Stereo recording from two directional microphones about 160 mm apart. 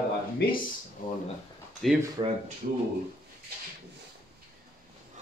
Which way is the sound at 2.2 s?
30° right (ahead or behind).